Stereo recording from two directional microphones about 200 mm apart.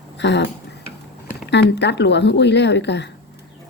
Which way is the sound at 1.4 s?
60° left (ahead or behind).